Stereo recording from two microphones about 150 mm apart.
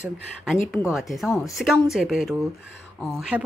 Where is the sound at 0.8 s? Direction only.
Centre (ahead or behind).